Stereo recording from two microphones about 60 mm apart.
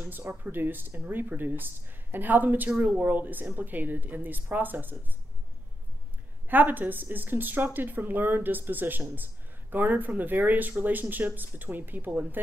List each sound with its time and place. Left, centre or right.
0.0 s speech: right
6.5 s speech: right